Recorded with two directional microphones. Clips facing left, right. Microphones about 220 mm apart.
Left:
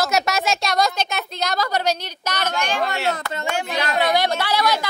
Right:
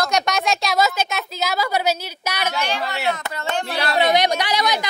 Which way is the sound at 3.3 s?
15° left (ahead or behind).